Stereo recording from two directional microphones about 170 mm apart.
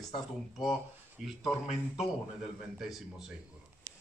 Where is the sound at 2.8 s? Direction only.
Centre (ahead or behind).